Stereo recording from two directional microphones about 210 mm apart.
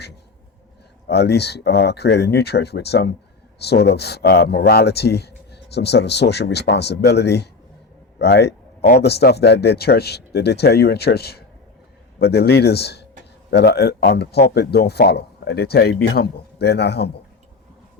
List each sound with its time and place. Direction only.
1.0 s speech: 50° left (ahead or behind)